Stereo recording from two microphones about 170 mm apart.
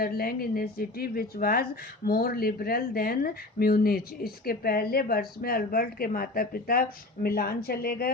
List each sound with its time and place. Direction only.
0.0 s speech: 60° left (ahead or behind)